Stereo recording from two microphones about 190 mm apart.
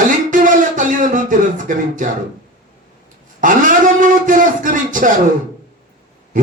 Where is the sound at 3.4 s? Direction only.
45° right (ahead or behind).